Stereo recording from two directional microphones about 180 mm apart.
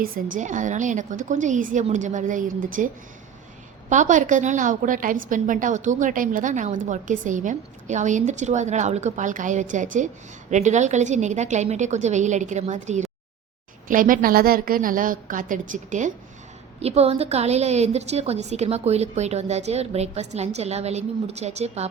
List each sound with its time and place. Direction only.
0.0 s a woman's voice: 45° right (ahead or behind)